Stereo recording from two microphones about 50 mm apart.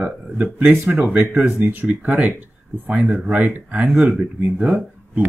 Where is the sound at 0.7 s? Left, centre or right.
Right.